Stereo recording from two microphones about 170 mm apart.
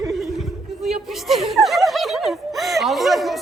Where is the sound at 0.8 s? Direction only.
Centre (ahead or behind).